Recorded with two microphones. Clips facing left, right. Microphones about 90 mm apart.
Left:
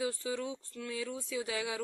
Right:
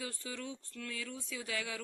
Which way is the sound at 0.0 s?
20° left (ahead or behind).